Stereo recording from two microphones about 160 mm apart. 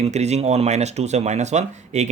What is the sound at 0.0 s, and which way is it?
Speech, 45° right (ahead or behind).